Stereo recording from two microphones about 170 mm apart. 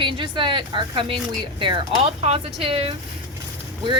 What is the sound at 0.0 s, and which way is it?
A woman's voice, 30° right (ahead or behind).